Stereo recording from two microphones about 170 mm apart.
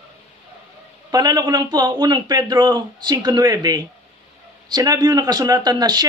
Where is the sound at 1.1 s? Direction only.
25° right (ahead or behind).